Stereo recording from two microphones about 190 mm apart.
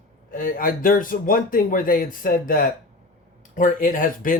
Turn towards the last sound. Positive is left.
turn(degrees=45)  # may be behind; listen again after turning